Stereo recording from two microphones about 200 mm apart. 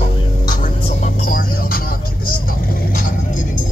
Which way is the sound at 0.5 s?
40° left (ahead or behind).